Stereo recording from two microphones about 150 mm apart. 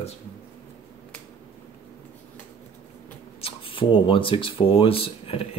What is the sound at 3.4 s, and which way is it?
Speech, 35° left (ahead or behind).